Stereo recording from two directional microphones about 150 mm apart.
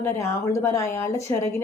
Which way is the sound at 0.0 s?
20° left (ahead or behind).